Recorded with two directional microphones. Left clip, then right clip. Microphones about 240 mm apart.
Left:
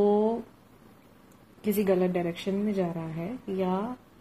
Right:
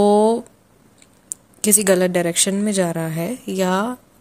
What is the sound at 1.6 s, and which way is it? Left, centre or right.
A woman's voice, right.